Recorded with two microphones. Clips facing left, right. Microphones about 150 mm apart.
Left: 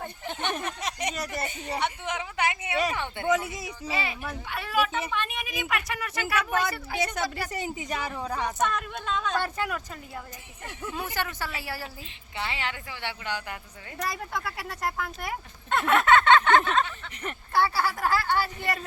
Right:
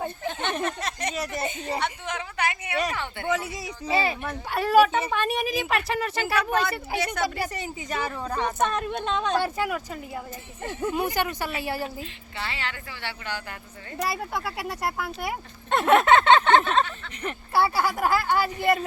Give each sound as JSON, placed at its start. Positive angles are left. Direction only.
{"t": 0.6, "sound": "speech", "side_deg": 15}
{"t": 1.4, "sound": "speech", "side_deg": -20}
{"t": 1.8, "sound": "a woman's voice", "side_deg": 20}
{"t": 3.9, "sound": "a woman's voice", "side_deg": -35}
{"t": 7.6, "sound": "a woman's voice", "side_deg": 20}
{"t": 8.6, "sound": "speech", "side_deg": -25}
{"t": 9.4, "sound": "speech", "side_deg": -10}
{"t": 12.4, "sound": "a woman's voice", "side_deg": 20}
{"t": 14.0, "sound": "speech", "side_deg": -10}
{"t": 15.7, "sound": "a sound", "side_deg": -25}
{"t": 17.2, "sound": "speech", "side_deg": -10}